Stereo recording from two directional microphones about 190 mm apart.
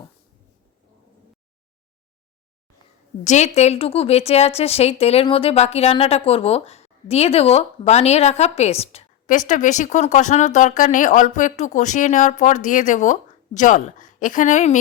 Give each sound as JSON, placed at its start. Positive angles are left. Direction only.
{"t": 3.2, "sound": "a woman's voice", "side_deg": 35}